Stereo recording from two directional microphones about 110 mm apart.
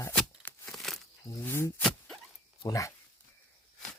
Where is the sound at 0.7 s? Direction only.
5° left (ahead or behind).